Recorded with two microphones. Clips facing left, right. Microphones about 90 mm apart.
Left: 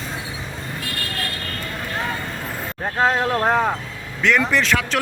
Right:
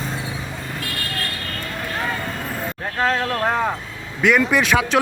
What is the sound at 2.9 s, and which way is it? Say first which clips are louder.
Speech: left 2 dB; 20° left (ahead or behind).